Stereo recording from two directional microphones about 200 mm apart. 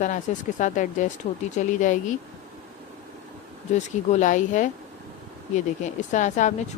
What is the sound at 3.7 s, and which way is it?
A woman's voice, 35° left (ahead or behind).